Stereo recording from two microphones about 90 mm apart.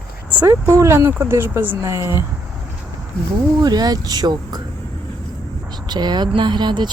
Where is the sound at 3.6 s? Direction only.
50° right (ahead or behind).